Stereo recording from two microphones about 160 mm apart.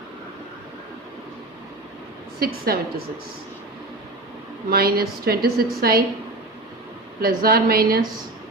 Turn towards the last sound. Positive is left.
turn(degrees=-70)  # may be behind; listen again after turning